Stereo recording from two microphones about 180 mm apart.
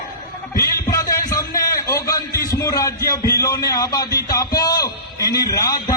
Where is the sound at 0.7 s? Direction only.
20° left (ahead or behind).